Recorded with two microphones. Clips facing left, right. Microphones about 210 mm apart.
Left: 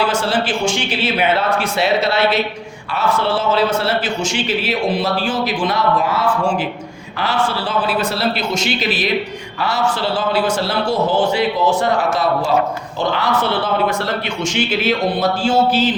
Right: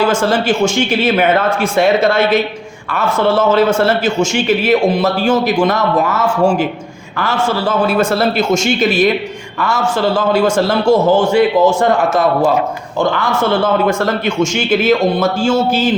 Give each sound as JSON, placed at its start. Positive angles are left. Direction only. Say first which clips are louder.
{"t": 0.0, "sound": "a man's voice", "louder": "right 5 dB", "side_deg": -45}